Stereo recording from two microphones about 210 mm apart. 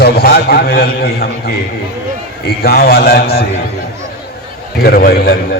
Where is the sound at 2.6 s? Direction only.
45° left (ahead or behind).